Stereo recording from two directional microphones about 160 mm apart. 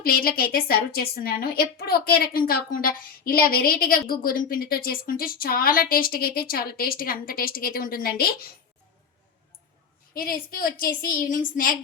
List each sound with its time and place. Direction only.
0.0 s a woman's voice: 70° left (ahead or behind)
10.2 s a woman's voice: 65° left (ahead or behind)